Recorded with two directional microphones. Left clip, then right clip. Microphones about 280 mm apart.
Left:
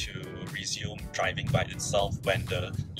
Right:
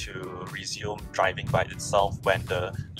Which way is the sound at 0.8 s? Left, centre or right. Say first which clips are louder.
Right 8 dB; centre.